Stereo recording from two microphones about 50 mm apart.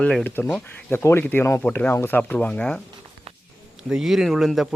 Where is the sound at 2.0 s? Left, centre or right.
Left.